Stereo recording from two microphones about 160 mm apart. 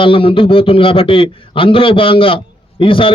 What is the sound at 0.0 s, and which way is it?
A man's voice, 35° left (ahead or behind).